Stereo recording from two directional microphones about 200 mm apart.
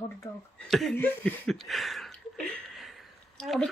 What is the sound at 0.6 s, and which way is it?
Speech, centre (ahead or behind).